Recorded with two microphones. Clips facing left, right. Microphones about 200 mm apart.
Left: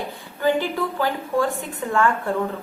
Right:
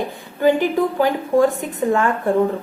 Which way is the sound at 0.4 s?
15° right (ahead or behind).